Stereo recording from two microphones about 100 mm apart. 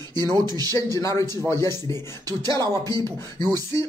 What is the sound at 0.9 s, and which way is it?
A man's voice, 30° left (ahead or behind).